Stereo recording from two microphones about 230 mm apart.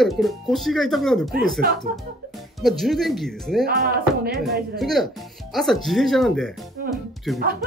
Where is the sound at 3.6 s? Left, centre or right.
Right.